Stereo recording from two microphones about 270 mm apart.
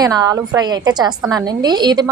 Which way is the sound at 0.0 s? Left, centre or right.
Centre.